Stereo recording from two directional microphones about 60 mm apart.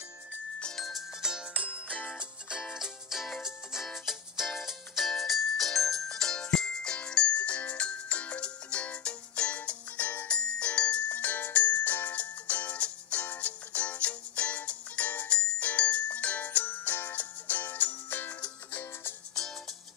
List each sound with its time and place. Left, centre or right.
0.6 s music: centre
0.8 s music: centre
2.6 s music: centre; by 19.1 s left